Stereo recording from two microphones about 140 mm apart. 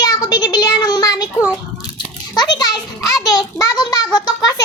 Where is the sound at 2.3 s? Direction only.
30° left (ahead or behind).